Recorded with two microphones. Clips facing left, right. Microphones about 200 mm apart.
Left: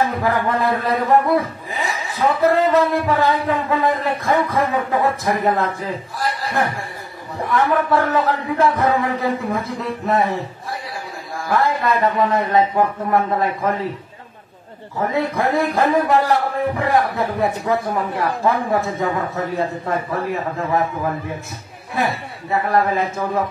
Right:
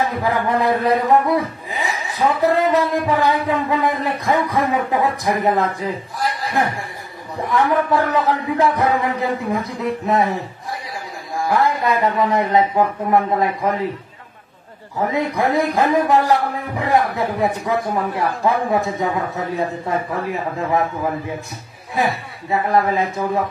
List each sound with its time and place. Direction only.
0.0 s a man's voice: 15° right (ahead or behind)
11.3 s a man's voice: 15° right (ahead or behind)
15.1 s a man's voice: 15° right (ahead or behind)